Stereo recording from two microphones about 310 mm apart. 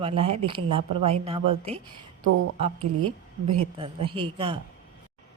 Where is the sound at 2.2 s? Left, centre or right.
Right.